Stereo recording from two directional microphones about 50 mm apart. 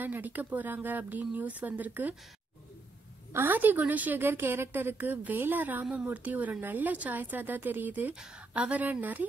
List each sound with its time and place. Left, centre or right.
0.0 s speech: right
3.3 s speech: right
4.2 s a woman's voice: right
4.9 s speech: right
8.1 s speech: centre
8.5 s speech: right